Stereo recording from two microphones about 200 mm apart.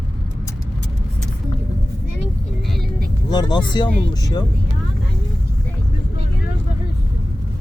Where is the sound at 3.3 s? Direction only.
20° left (ahead or behind).